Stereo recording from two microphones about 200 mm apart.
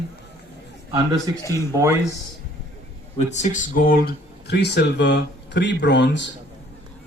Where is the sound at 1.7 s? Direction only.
15° right (ahead or behind).